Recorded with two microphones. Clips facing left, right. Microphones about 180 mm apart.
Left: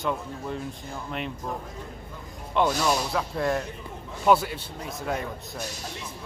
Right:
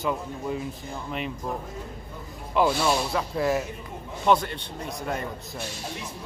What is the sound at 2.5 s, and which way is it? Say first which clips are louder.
Speech: right 1 dB; centre (ahead or behind).